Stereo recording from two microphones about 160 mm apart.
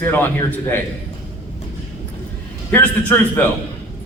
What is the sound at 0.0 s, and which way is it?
Speech, 10° left (ahead or behind).